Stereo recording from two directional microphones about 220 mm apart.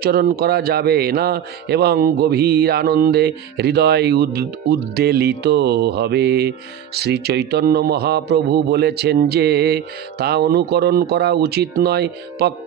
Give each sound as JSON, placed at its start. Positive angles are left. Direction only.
{"t": 0.0, "sound": "a man's voice", "side_deg": -45}